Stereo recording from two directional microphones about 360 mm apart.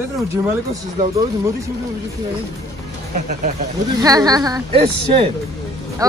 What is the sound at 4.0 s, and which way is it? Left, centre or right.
Speech, centre.